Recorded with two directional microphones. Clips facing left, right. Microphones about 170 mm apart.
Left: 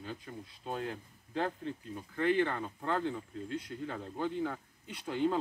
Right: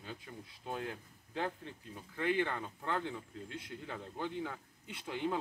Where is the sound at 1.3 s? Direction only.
15° right (ahead or behind).